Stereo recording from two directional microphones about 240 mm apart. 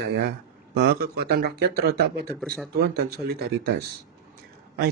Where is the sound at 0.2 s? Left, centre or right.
Right.